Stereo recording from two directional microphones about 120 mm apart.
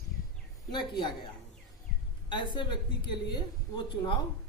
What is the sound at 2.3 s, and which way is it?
A woman's voice, 40° left (ahead or behind).